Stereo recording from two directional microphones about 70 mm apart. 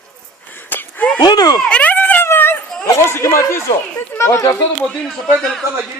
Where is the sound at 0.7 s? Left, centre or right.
Left.